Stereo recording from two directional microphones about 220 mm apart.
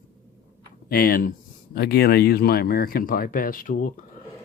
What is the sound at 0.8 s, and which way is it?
Speech, 40° left (ahead or behind).